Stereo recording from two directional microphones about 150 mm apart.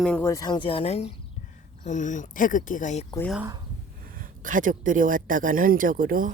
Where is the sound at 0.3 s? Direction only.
25° left (ahead or behind); by 1.1 s 40° left (ahead or behind).